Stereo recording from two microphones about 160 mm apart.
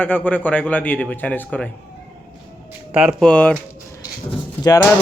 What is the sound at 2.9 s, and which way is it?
Speech, 5° right (ahead or behind).